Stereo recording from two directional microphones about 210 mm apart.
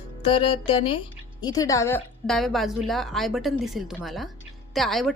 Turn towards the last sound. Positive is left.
turn(degrees=0)  # may be behind; listen again after turning